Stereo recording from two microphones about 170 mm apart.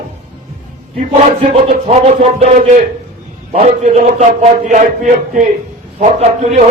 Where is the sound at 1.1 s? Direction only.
35° right (ahead or behind).